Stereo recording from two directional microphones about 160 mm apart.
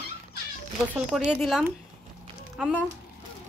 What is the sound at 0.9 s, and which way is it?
Speech, 5° right (ahead or behind).